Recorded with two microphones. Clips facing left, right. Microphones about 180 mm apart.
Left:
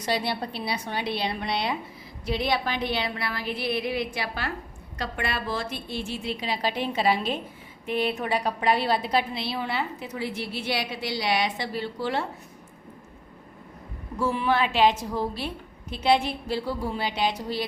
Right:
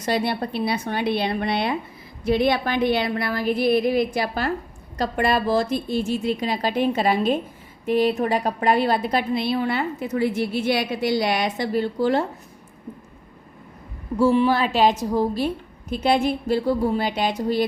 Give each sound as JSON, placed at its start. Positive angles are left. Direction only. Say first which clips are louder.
{"t": 0.0, "sound": "a woman's voice", "louder": "right 5 dB", "side_deg": -50}
{"t": 14.2, "sound": "a woman's voice", "louder": "right 6 dB", "side_deg": -30}